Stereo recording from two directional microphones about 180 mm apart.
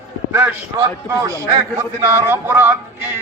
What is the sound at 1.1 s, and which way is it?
A man's voice, 15° right (ahead or behind).